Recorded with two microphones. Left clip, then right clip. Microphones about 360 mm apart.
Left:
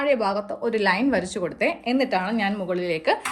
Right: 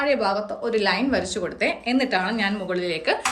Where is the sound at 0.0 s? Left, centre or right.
Centre.